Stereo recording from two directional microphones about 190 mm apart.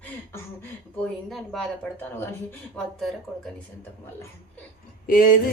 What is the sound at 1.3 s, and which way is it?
Speech, centre (ahead or behind).